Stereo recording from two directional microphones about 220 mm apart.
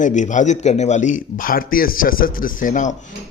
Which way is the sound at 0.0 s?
35° left (ahead or behind).